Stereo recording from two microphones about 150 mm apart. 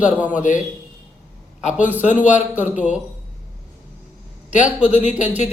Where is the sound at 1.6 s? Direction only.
10° right (ahead or behind).